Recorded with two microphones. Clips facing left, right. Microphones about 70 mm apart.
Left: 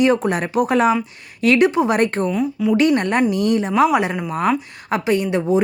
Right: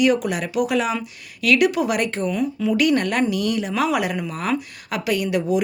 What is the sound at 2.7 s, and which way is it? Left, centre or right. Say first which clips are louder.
A woman's voice: left 3 dB; left.